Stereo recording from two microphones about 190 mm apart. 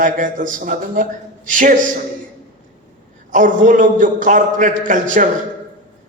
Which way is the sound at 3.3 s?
40° right (ahead or behind).